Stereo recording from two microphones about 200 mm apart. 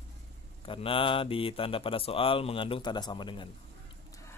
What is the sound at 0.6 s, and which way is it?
A man's voice, 25° left (ahead or behind).